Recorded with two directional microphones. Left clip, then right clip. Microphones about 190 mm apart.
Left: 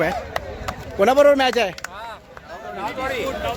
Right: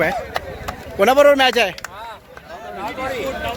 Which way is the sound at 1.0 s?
5° left (ahead or behind).